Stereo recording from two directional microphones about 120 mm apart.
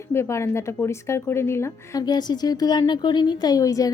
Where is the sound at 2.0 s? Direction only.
35° left (ahead or behind).